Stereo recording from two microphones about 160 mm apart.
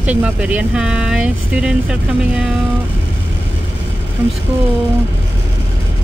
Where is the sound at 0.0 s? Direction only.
10° right (ahead or behind).